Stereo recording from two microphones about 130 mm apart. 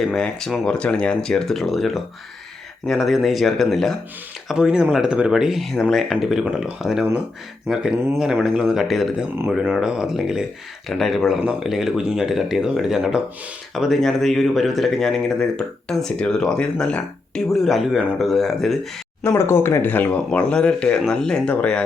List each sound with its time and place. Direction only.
0.0 s speech: 5° left (ahead or behind)
7.9 s speech: 20° right (ahead or behind)
8.2 s speech: 5° right (ahead or behind)
19.2 s speech: 20° left (ahead or behind)